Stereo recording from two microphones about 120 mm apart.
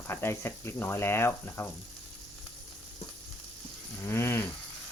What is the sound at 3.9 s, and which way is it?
Speech, 20° left (ahead or behind).